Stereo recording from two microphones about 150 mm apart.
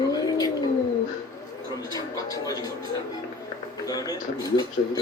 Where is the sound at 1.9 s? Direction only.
25° left (ahead or behind).